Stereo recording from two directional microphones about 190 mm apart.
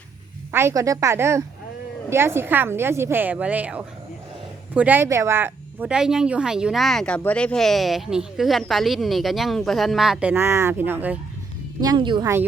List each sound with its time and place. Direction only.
0.5 s a woman's voice: 15° right (ahead or behind)
11.8 s speech: 20° right (ahead or behind)